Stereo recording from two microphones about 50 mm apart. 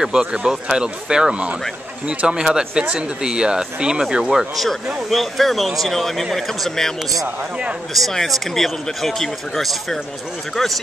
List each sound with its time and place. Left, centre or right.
0.0 s speech: centre
7.9 s speech: centre